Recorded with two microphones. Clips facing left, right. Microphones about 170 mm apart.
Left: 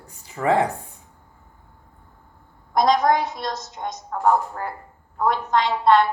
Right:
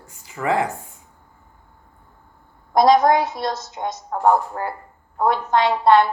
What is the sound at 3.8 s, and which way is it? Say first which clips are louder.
Speech: right 4 dB; 45° right (ahead or behind).